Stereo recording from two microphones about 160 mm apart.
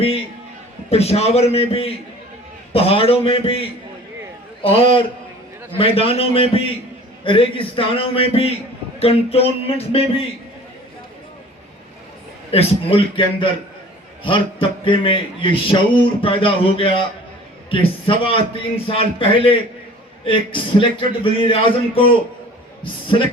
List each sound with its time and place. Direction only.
0.9 s a man's voice: 40° left (ahead or behind)
12.5 s a man's voice: 35° left (ahead or behind)